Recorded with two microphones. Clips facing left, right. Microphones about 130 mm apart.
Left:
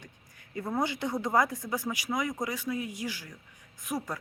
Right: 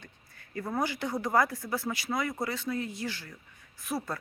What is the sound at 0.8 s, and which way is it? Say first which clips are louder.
Speech: left 1 dB; 20° left (ahead or behind).